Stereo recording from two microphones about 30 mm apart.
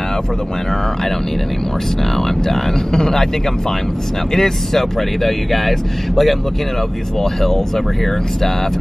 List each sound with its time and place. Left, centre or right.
2.1 s speech: centre
4.3 s speech: centre